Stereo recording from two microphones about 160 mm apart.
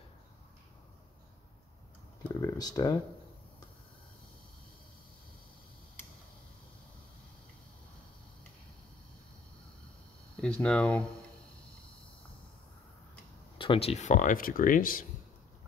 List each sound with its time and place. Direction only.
2.4 s speech: 20° left (ahead or behind)
10.3 s speech: 5° left (ahead or behind)
13.6 s speech: 35° left (ahead or behind); by 15.0 s 60° left (ahead or behind)